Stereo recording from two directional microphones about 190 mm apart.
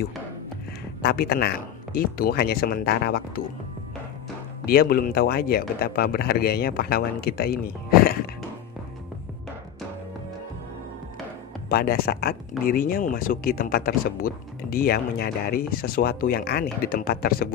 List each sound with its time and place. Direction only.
1.0 s speech: 50° left (ahead or behind)
4.6 s speech: 55° left (ahead or behind)
11.7 s speech: 50° left (ahead or behind)